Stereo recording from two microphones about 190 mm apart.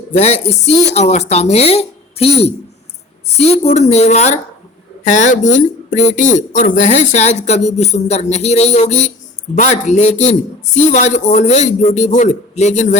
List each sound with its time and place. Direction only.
0.1 s speech: 35° left (ahead or behind)